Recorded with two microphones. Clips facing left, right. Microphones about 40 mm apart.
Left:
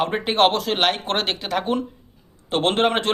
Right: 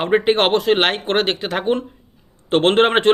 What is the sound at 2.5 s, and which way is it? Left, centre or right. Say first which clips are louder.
Speech: right 5 dB; right.